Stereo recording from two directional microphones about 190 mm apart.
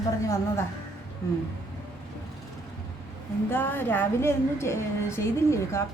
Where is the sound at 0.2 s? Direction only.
15° left (ahead or behind).